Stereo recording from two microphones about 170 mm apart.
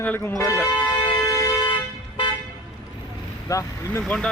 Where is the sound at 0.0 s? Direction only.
10° left (ahead or behind).